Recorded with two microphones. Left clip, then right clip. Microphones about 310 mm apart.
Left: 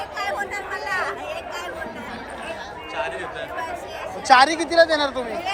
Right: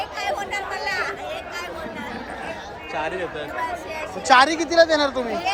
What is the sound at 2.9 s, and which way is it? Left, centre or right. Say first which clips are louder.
Chatter: right 1 dB; right.